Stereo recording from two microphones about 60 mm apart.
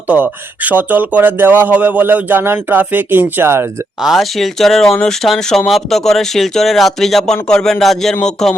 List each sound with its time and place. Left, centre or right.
0.1 s speech: right
4.0 s speech: centre